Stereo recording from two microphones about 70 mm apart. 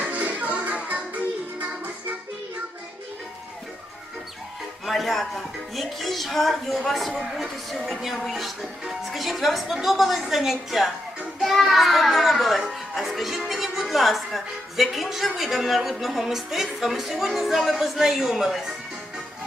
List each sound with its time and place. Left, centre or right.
0.0 s music: right
4.9 s speech: centre